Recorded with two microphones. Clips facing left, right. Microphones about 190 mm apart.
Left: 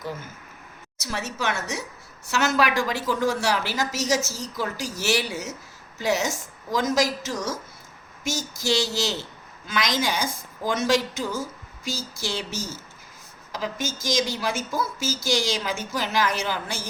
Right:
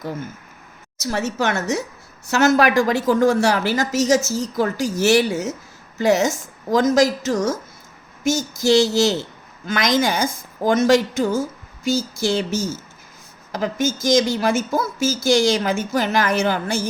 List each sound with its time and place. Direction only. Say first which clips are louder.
0.9 s a woman's voice: right 8 dB; 45° right (ahead or behind)